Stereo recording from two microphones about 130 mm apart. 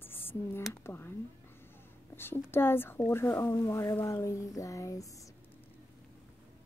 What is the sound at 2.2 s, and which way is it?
Speech, 15° left (ahead or behind).